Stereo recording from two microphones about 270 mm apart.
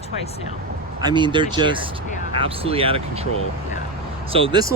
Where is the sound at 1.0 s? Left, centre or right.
Centre.